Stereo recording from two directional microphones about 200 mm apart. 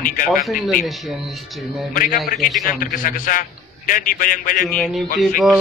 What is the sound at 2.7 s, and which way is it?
A man's voice, 45° left (ahead or behind).